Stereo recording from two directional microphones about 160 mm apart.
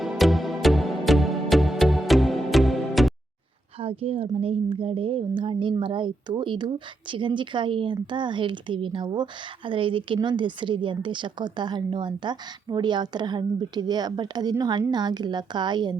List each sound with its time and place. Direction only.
0.0 s music: centre (ahead or behind)
3.8 s a woman's voice: 35° right (ahead or behind)